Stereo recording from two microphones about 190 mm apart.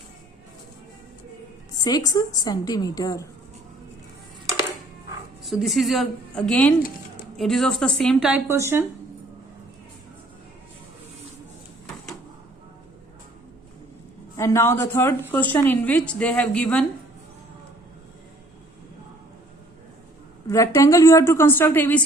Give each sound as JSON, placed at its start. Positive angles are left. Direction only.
{"t": 1.8, "sound": "a woman's voice", "side_deg": 20}
{"t": 5.5, "sound": "a woman's voice", "side_deg": 0}
{"t": 14.3, "sound": "a woman's voice", "side_deg": 15}
{"t": 20.5, "sound": "a woman's voice", "side_deg": 15}